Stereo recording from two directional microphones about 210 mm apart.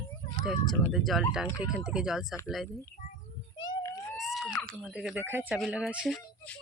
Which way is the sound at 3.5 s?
20° left (ahead or behind).